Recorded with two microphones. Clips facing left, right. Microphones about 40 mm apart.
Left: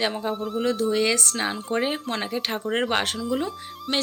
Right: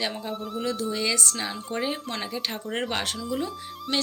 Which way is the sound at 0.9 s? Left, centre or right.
Left.